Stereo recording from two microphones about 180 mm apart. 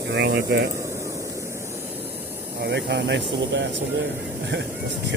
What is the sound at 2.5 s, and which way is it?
Speech, 70° right (ahead or behind).